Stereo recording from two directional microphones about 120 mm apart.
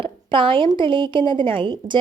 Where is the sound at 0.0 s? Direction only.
45° right (ahead or behind).